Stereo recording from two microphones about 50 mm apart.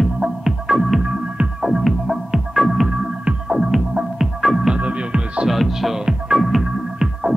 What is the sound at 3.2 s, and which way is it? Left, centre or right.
Music, centre.